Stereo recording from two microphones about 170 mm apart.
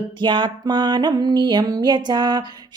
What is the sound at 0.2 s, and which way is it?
Music, 25° right (ahead or behind).